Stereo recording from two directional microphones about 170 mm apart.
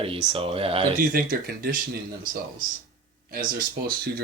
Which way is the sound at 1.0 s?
60° right (ahead or behind).